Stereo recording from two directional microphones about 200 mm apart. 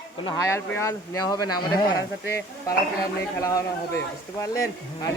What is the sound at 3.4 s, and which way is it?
A man's voice, 15° left (ahead or behind).